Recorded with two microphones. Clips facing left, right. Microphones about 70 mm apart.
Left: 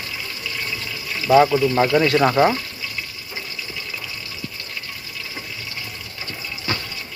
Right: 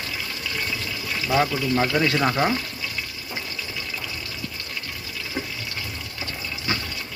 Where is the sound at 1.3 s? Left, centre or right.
Left.